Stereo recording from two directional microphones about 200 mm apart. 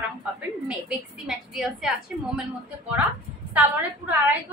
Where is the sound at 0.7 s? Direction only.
5° right (ahead or behind).